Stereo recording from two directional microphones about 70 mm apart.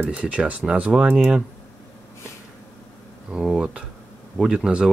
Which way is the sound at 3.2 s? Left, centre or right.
Centre.